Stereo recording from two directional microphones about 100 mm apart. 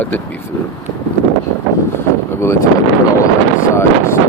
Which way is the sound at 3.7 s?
25° left (ahead or behind).